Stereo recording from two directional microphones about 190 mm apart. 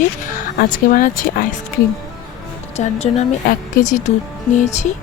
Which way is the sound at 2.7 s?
35° left (ahead or behind).